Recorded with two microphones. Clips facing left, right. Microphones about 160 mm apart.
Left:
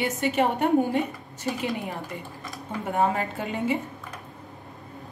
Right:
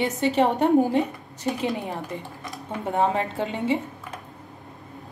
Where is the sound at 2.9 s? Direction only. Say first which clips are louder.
Right 1 dB; 25° right (ahead or behind).